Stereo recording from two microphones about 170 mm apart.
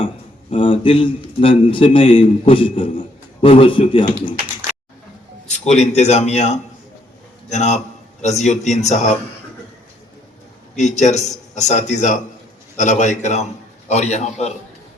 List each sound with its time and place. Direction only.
0.5 s a man's voice: 30° left (ahead or behind)
5.5 s a man's voice: 40° left (ahead or behind)
10.8 s a man's voice: 45° left (ahead or behind)